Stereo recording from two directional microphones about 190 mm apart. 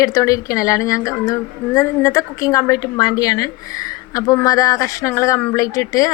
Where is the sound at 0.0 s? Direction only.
20° left (ahead or behind).